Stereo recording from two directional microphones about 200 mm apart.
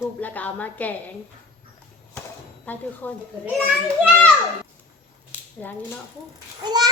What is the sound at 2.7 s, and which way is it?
Speech, 10° left (ahead or behind).